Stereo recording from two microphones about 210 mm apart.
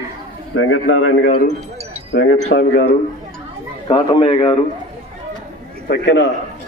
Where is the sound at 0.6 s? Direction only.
60° left (ahead or behind).